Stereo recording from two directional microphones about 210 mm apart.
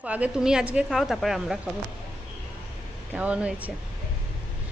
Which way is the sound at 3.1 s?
5° right (ahead or behind).